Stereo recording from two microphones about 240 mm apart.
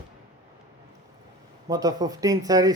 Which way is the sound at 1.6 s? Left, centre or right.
Centre.